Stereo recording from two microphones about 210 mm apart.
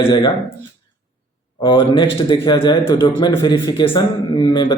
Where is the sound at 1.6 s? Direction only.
20° left (ahead or behind).